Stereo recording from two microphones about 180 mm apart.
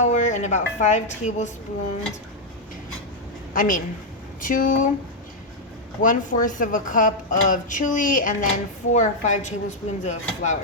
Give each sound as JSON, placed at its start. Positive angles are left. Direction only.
{"t": 0.0, "sound": "speech", "side_deg": 40}
{"t": 3.5, "sound": "a woman's voice", "side_deg": 50}
{"t": 6.0, "sound": "a woman's voice", "side_deg": 45}